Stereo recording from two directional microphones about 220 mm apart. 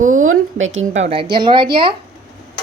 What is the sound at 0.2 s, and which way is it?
Speech, 65° right (ahead or behind).